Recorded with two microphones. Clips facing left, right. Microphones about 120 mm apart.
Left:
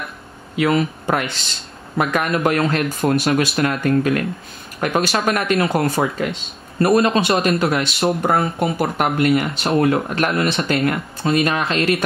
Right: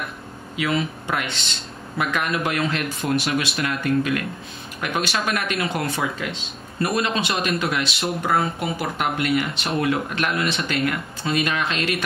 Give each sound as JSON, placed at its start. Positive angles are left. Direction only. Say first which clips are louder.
{"t": 0.6, "sound": "speech", "louder": "left 6 dB", "side_deg": 45}